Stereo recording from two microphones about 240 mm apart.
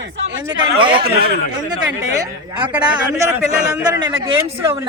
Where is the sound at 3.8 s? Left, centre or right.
Right.